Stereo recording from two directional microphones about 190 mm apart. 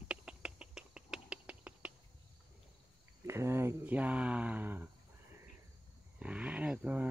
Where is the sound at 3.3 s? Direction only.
15° right (ahead or behind).